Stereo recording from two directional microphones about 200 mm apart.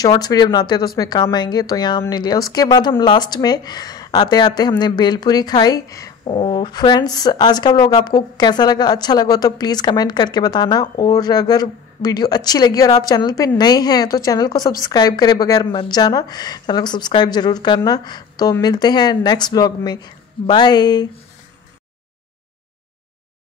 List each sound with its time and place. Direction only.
0.0 s speech: 20° left (ahead or behind)